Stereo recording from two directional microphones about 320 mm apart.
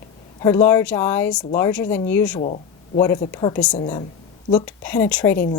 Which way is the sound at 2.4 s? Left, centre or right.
Left.